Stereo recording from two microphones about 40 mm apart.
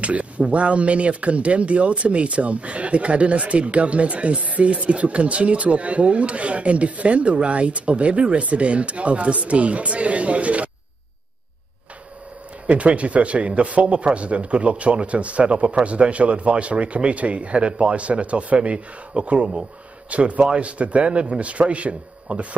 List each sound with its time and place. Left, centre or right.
0.0 s speech: right
12.6 s speech: right